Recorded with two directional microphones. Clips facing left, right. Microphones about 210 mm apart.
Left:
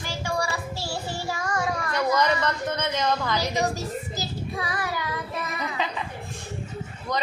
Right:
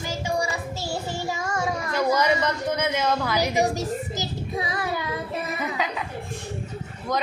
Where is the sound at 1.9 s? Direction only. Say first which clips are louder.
Right 2 dB; 10° right (ahead or behind).